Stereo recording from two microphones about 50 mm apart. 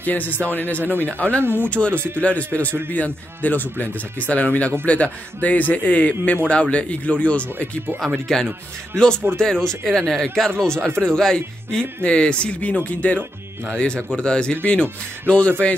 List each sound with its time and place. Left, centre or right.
0.0 s speech: left
1.4 s speech: right
1.7 s speech: left
8.3 s speech: centre
12.0 s speech: left